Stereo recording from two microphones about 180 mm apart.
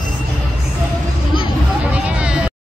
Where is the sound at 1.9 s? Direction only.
5° right (ahead or behind).